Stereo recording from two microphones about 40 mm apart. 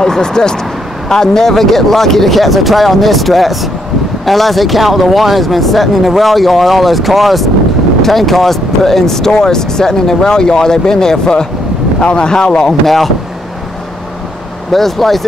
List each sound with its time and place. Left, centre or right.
0.0 s speech: centre
12.8 s speech: centre
14.7 s speech: centre